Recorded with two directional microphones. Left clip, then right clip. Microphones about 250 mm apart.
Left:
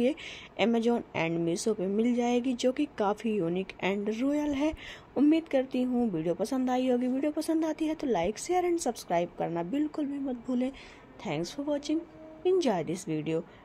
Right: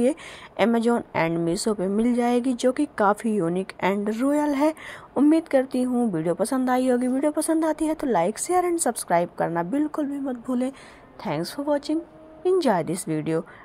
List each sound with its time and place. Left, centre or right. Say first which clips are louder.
0.0 s a woman's voice: right 6 dB; centre